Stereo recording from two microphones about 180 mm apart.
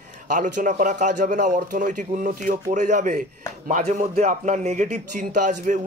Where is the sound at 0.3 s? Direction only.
45° right (ahead or behind).